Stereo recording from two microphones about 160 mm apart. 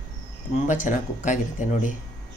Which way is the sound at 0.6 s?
50° left (ahead or behind).